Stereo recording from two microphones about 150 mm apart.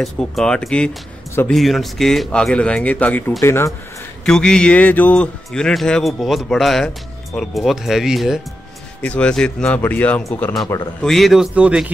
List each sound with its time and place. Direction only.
0.0 s speech: 5° left (ahead or behind)
4.3 s speech: 5° left (ahead or behind)